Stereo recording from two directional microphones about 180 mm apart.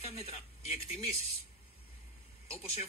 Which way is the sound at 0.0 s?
35° left (ahead or behind).